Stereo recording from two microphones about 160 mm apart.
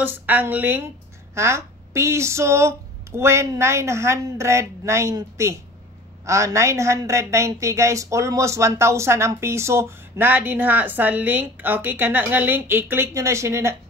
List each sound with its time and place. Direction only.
0.0 s a woman's voice: 10° right (ahead or behind)